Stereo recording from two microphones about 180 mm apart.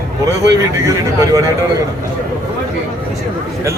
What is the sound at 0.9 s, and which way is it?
Speech, 20° right (ahead or behind).